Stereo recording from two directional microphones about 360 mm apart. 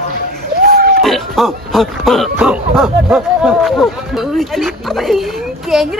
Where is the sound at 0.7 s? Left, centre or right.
Right.